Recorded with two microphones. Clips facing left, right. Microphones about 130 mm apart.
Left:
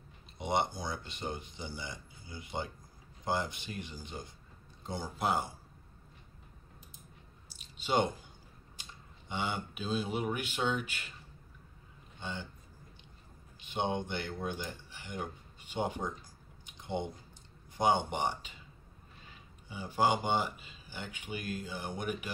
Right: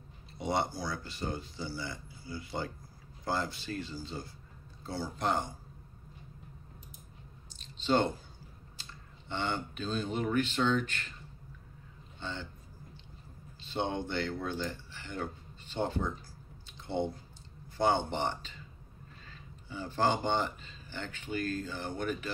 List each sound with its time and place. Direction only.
0.4 s speech: 20° left (ahead or behind)
5.1 s speech: 5° left (ahead or behind)
7.5 s a sound: 10° left (ahead or behind)
9.3 s speech: 10° left (ahead or behind)
12.2 s speech: 15° left (ahead or behind)
13.6 s speech: 15° left (ahead or behind)
16.6 s squish: 15° left (ahead or behind)
17.7 s speech: 15° left (ahead or behind)